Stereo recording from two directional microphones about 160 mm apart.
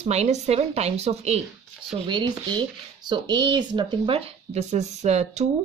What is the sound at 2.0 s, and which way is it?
Speech, 30° right (ahead or behind).